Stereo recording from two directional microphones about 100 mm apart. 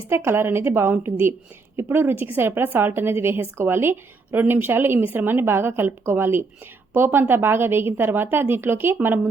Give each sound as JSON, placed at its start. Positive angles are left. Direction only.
{"t": 0.1, "sound": "a woman's voice", "side_deg": -25}